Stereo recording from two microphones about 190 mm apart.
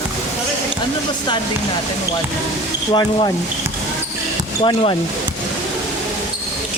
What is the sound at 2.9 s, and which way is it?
Speech, 20° left (ahead or behind).